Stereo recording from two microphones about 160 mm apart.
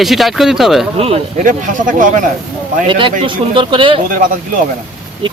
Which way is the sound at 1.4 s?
55° right (ahead or behind).